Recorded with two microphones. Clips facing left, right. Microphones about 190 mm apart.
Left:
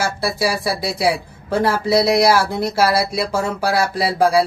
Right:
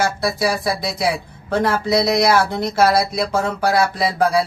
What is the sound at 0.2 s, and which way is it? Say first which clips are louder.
Speech: even; 5° left (ahead or behind).